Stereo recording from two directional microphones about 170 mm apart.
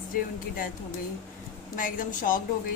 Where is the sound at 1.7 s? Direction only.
50° left (ahead or behind).